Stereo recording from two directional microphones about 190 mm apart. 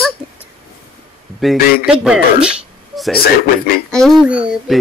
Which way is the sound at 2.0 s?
5° right (ahead or behind).